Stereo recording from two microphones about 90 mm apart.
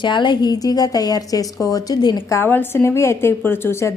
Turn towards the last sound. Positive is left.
turn(degrees=25)  # may be behind; listen again after turning